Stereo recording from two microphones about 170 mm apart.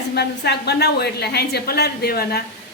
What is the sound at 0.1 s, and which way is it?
A woman's voice, 75° left (ahead or behind).